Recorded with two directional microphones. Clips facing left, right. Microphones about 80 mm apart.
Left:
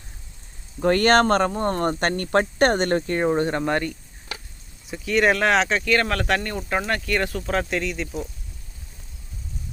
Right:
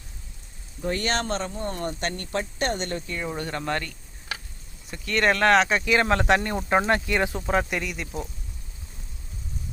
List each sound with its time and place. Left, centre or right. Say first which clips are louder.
0.8 s speech: left 10 dB; left
3.3 s speech: left 7 dB; left
4.9 s speech: left 3 dB; centre